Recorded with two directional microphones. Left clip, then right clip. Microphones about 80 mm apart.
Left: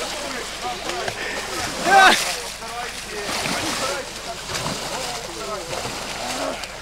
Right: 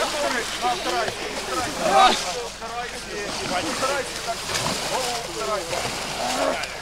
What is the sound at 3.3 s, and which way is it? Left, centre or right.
Boat, left.